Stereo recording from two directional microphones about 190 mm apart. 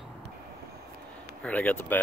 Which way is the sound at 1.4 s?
10° left (ahead or behind).